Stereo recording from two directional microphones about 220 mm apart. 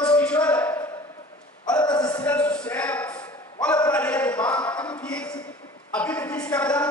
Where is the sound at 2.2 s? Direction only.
5° left (ahead or behind).